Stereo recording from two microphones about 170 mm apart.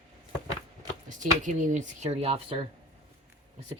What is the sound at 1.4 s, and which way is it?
Speech, 45° right (ahead or behind).